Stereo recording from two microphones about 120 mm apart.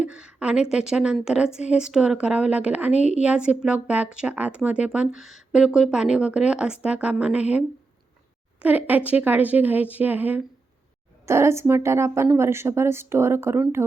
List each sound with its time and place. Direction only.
0.0 s speech: 10° right (ahead or behind)
2.9 s a woman's voice: 70° left (ahead or behind)
3.2 s a woman's voice: 10° right (ahead or behind)